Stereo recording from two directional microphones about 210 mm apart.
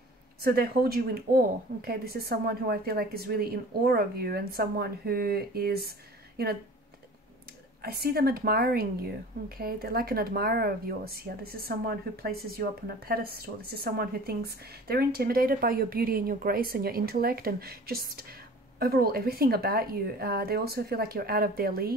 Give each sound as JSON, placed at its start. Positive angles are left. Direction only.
{"t": 0.4, "sound": "speech", "side_deg": -45}
{"t": 7.8, "sound": "speech", "side_deg": -45}